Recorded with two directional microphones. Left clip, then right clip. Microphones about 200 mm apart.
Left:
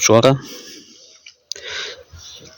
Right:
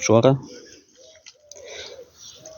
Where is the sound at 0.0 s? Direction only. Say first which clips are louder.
Left 4 dB; 5° left (ahead or behind).